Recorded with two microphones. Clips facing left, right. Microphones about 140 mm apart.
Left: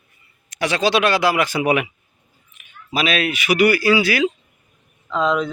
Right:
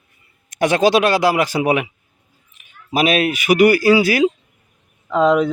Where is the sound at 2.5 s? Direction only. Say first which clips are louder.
Right 4 dB; 35° right (ahead or behind).